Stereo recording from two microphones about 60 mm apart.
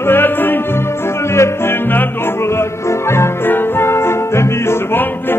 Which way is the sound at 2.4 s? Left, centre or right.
Left.